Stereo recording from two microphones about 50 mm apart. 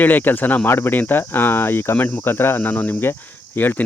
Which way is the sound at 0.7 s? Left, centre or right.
Left.